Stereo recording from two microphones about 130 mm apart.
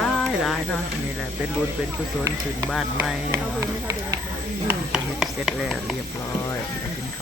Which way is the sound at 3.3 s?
25° right (ahead or behind).